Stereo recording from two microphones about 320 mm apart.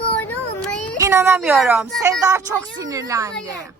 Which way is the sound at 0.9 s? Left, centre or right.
Centre.